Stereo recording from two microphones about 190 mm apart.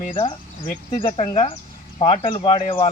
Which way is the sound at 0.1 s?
25° left (ahead or behind).